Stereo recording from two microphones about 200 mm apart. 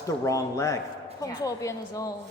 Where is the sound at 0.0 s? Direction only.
15° left (ahead or behind).